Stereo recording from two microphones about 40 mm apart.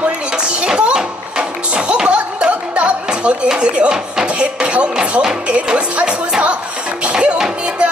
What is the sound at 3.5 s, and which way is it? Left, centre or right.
Speech, right.